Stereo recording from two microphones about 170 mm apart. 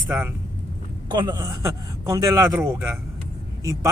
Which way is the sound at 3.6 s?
20° right (ahead or behind).